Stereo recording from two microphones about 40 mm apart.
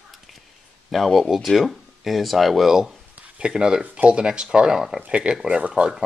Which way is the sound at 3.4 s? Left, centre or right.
Right.